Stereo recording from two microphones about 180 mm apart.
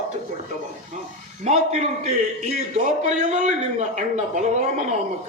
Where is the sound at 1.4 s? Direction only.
40° right (ahead or behind).